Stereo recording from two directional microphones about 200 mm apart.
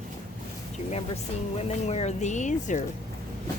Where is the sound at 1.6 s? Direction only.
35° left (ahead or behind).